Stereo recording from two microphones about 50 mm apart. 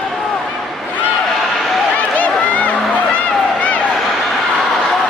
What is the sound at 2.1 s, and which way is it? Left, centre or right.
Run, left.